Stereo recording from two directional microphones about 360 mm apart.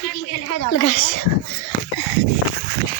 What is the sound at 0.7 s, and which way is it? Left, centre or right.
Speech, left.